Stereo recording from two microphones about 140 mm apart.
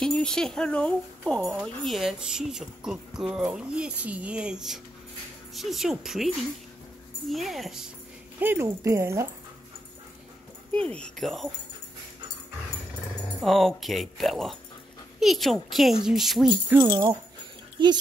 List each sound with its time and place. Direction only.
0.0 s speech: 5° left (ahead or behind)
8.4 s speech: 15° right (ahead or behind)
10.7 s speech: 5° left (ahead or behind)
13.4 s speech: centre (ahead or behind)
16.6 s speech: 15° right (ahead or behind)
17.8 s speech: 35° right (ahead or behind)